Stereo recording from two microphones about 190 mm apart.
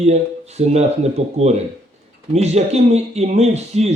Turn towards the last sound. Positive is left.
turn(degrees=-35)  # may be behind; listen again after turning